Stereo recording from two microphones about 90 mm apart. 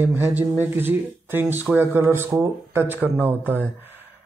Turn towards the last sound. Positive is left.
turn(degrees=-20)  # may be behind; listen again after turning